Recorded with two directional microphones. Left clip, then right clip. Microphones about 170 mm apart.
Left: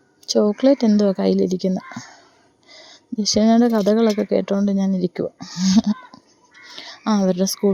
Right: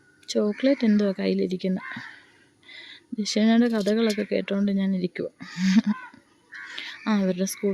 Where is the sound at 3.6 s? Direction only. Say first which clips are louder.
Left 7 dB; 10° left (ahead or behind).